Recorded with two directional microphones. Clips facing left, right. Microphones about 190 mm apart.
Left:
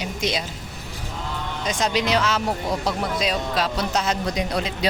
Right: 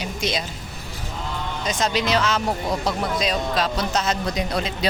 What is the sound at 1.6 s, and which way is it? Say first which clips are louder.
Speech: even; 15° left (ahead or behind).